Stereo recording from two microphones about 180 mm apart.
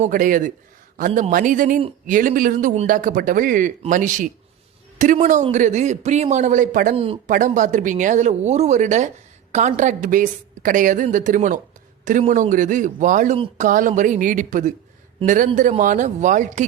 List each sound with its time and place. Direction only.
0.0 s a man's voice: 50° right (ahead or behind)
6.9 s speech: 30° right (ahead or behind)
7.3 s a man's voice: 45° right (ahead or behind)